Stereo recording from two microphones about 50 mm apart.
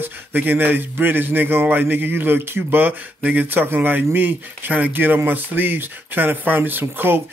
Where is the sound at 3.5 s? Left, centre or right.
Right.